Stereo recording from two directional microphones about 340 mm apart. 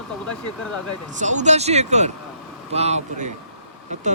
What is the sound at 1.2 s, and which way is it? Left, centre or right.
Speech, right.